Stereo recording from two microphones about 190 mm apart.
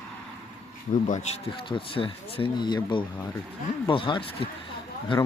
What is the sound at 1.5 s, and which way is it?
Speech, 25° left (ahead or behind).